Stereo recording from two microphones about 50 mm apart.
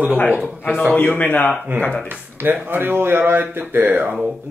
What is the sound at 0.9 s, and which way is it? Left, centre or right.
Speech, left.